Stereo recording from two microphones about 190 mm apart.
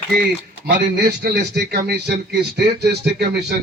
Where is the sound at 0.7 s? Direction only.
60° right (ahead or behind).